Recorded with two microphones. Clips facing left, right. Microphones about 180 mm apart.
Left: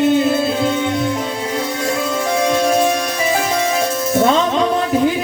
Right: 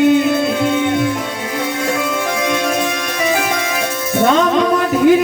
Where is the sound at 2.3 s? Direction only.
35° left (ahead or behind).